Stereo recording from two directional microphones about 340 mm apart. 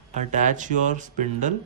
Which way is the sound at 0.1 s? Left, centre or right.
Right.